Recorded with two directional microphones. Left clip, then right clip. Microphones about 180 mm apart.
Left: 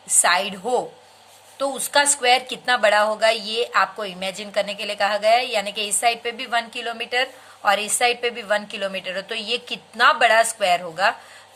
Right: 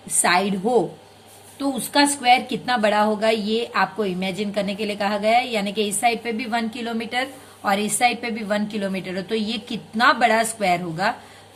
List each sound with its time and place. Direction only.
0.2 s a woman's voice: 35° left (ahead or behind)